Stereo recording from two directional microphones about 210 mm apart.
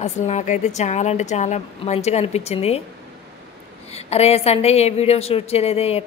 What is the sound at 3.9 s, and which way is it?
A woman's voice, 30° left (ahead or behind).